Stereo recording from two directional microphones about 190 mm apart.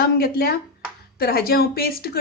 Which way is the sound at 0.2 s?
55° left (ahead or behind).